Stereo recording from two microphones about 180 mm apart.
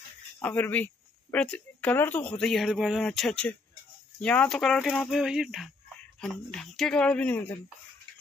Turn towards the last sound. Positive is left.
turn(degrees=10)  # may be behind; listen again after turning